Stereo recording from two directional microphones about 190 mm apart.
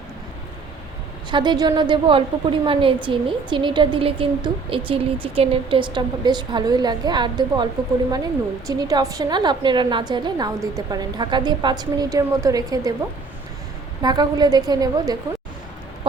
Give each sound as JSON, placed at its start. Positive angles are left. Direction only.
{"t": 1.3, "sound": "a woman's voice", "side_deg": -25}
{"t": 14.0, "sound": "a woman's voice", "side_deg": -20}